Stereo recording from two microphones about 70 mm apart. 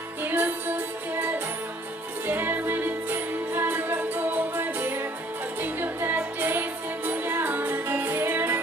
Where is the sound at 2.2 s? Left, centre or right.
Right.